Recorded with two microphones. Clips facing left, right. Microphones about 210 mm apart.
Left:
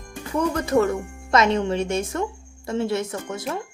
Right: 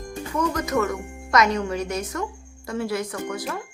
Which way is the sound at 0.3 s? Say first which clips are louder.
Left 3 dB; 30° left (ahead or behind).